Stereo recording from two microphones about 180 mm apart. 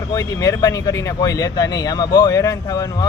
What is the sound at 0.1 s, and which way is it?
Speech, 20° left (ahead or behind).